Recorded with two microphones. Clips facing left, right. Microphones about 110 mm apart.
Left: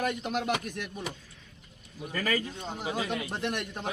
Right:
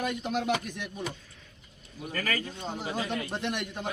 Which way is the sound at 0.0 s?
5° left (ahead or behind).